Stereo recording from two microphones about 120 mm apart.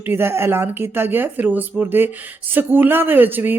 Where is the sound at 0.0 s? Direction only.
20° right (ahead or behind).